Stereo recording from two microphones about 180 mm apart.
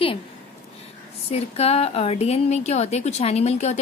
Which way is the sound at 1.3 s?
35° left (ahead or behind).